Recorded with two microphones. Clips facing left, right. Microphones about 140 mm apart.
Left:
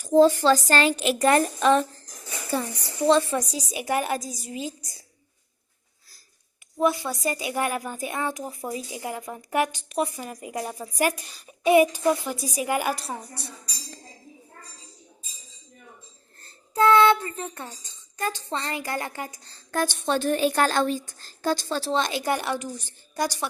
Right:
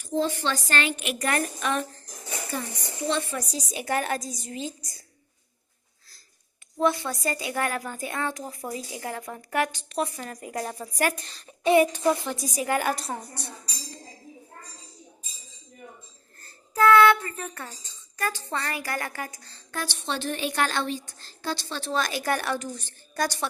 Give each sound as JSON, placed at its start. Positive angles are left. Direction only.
{"t": 0.0, "sound": "a woman's voice", "side_deg": 40}
{"t": 3.1, "sound": "a woman's voice", "side_deg": 30}
{"t": 3.5, "sound": "a woman's voice", "side_deg": 15}
{"t": 6.7, "sound": "a woman's voice", "side_deg": 10}
{"t": 13.0, "sound": "a woman's voice", "side_deg": 0}
{"t": 16.4, "sound": "a woman's voice", "side_deg": 25}
{"t": 19.7, "sound": "a woman's voice", "side_deg": 45}
{"t": 21.9, "sound": "a woman's voice", "side_deg": 25}